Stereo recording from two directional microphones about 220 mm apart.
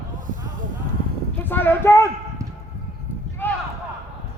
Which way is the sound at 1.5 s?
10° left (ahead or behind).